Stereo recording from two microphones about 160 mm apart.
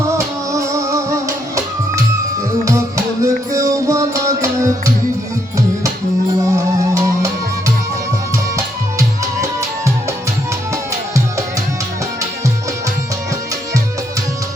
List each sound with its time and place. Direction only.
0.0 s music: 20° right (ahead or behind)
3.2 s music: 20° right (ahead or behind)
6.4 s music: 20° right (ahead or behind)
8.5 s music: 20° right (ahead or behind)